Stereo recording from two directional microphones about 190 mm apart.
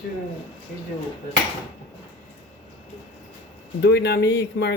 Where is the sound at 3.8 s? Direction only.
65° left (ahead or behind).